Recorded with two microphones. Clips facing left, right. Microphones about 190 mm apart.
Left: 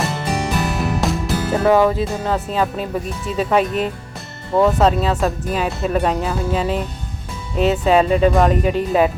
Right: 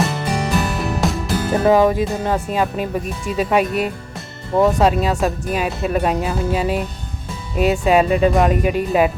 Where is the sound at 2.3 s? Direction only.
15° right (ahead or behind).